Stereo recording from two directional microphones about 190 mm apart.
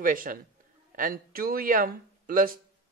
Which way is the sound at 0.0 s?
45° right (ahead or behind).